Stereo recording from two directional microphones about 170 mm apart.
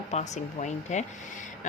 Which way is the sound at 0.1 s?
40° left (ahead or behind).